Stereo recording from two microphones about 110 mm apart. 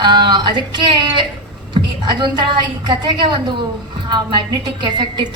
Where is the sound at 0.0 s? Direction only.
45° right (ahead or behind).